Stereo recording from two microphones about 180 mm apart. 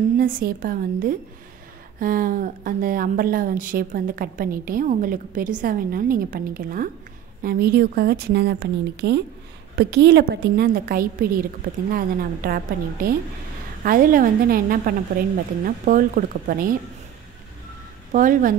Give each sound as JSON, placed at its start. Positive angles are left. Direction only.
{"t": 0.2, "sound": "a woman's voice", "side_deg": -55}
{"t": 18.1, "sound": "speech", "side_deg": -50}